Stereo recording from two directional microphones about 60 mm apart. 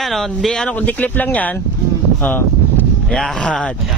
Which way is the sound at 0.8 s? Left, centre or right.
Left.